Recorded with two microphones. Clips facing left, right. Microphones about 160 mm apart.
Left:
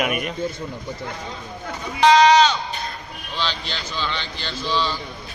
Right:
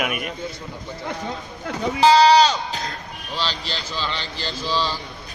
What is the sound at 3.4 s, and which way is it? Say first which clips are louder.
Speech: even; 35° right (ahead or behind).